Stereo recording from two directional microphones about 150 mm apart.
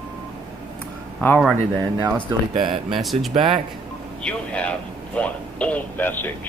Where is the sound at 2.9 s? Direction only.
Centre (ahead or behind).